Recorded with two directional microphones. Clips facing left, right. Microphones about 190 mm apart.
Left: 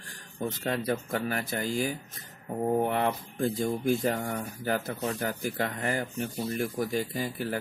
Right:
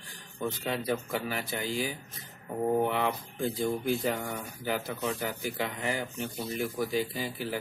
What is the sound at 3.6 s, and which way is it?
Speech, 45° left (ahead or behind).